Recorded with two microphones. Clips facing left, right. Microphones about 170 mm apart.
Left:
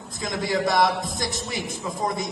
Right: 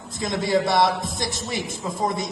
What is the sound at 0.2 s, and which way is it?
A man's voice, 20° right (ahead or behind).